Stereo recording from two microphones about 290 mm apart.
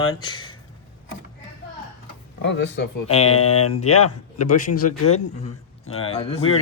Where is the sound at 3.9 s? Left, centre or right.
Left.